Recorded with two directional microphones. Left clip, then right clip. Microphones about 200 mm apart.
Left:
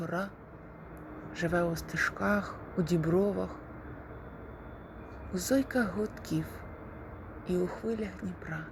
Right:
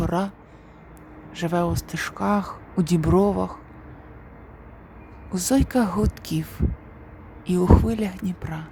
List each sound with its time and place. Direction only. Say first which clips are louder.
0.0 s a sound: right 10 dB; 30° right (ahead or behind)
1.3 s speech: right 6 dB; 20° right (ahead or behind)
5.3 s a woman's voice: right 7 dB; 25° right (ahead or behind)